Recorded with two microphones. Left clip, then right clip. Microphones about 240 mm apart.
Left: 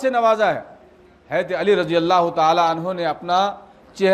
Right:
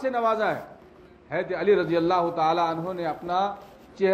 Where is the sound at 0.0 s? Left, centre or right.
Left.